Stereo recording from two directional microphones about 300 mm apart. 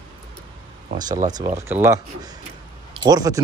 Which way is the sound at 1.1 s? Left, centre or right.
Right.